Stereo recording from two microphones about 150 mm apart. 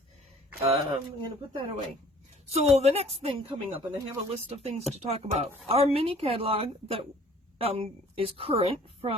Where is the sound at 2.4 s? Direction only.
45° right (ahead or behind).